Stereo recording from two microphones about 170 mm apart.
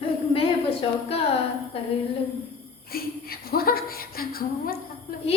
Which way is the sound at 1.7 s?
35° left (ahead or behind).